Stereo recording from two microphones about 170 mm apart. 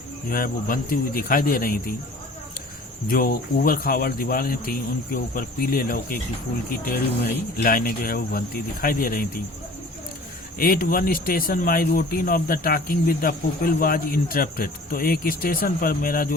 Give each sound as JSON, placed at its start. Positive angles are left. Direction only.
{"t": 0.3, "sound": "speech", "side_deg": 55}
{"t": 3.1, "sound": "speech", "side_deg": 60}
{"t": 7.5, "sound": "speech", "side_deg": 55}
{"t": 10.6, "sound": "speech", "side_deg": 55}